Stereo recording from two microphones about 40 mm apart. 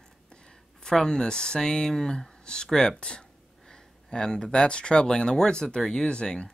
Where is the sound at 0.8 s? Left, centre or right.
Centre.